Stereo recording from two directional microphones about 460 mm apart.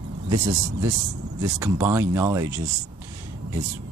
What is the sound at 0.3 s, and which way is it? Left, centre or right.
Speech, centre.